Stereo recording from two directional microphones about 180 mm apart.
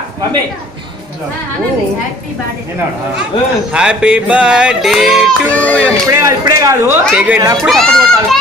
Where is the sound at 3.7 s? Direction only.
5° right (ahead or behind).